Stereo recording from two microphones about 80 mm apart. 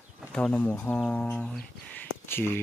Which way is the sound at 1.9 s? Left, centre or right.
Left.